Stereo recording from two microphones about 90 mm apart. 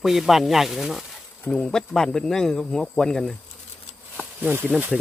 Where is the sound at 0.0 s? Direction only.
5° right (ahead or behind).